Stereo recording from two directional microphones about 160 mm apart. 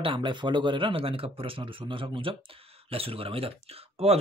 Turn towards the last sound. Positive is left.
turn(degrees=-40)  # may be behind; listen again after turning